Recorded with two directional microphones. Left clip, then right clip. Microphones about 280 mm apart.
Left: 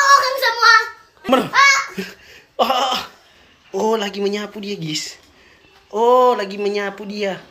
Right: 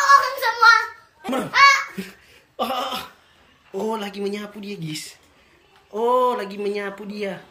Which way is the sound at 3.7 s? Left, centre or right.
Centre.